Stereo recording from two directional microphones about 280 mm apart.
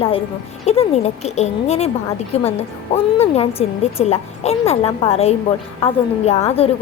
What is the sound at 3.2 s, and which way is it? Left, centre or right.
A woman's voice, left.